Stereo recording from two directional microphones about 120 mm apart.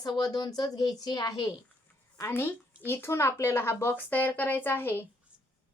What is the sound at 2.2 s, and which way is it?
Speech, 20° left (ahead or behind).